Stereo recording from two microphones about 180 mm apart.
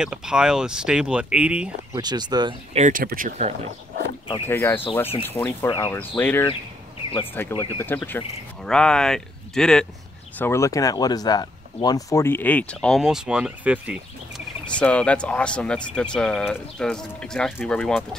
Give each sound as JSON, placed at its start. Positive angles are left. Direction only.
{"t": 0.0, "sound": "speech", "side_deg": -5}
{"t": 2.0, "sound": "speech", "side_deg": -25}
{"t": 2.8, "sound": "speech", "side_deg": -50}
{"t": 4.5, "sound": "speech", "side_deg": 15}
{"t": 10.4, "sound": "speech", "side_deg": 15}
{"t": 14.8, "sound": "speech", "side_deg": 5}